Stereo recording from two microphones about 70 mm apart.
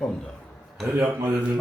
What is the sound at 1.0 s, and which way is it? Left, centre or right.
Speech, right.